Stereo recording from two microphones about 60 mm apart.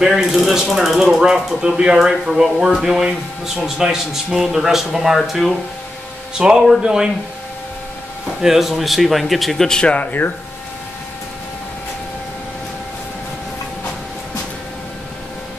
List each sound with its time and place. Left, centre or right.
0.0 s speech: centre
6.3 s speech: centre
8.4 s a man's voice: centre
9.9 s speech: left